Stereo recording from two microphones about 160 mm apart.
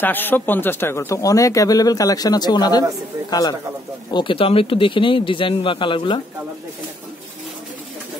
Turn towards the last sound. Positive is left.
turn(degrees=30)  # may be behind; listen again after turning